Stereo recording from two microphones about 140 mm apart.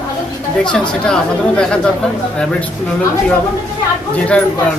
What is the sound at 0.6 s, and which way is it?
Speech, 5° left (ahead or behind).